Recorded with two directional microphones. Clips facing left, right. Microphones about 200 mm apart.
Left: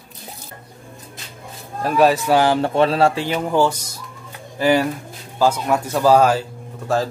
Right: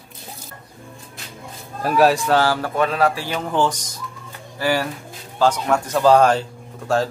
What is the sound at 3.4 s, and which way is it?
Speech, 10° left (ahead or behind).